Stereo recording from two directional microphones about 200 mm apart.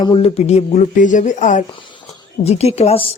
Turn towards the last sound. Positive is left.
turn(degrees=30)  # may be behind; listen again after turning